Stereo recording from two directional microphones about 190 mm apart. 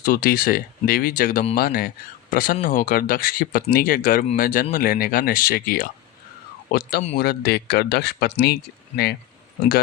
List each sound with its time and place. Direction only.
0.0 s speech: 50° left (ahead or behind)